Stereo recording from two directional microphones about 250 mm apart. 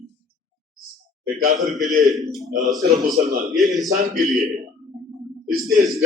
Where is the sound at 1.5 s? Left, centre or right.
Centre.